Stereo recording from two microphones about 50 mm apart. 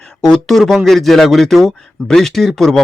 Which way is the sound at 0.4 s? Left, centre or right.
Centre.